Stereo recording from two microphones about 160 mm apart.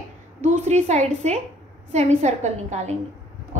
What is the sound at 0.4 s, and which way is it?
A woman's voice, 45° right (ahead or behind).